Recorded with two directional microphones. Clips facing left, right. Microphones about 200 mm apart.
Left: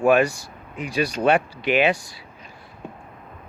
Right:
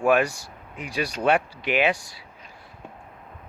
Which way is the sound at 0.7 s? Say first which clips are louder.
Left 5 dB; 10° right (ahead or behind).